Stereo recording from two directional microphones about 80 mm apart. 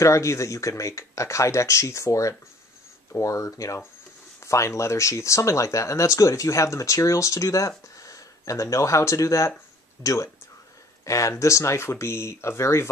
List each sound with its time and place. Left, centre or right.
0.0 s speech: left